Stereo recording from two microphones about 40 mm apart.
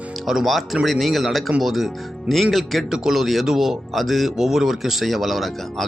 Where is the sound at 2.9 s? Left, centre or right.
Centre.